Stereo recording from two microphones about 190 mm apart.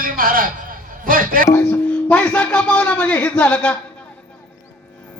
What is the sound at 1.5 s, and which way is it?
Speech, 10° left (ahead or behind).